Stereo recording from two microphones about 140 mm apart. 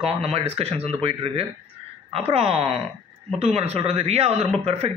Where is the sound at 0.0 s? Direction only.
45° right (ahead or behind).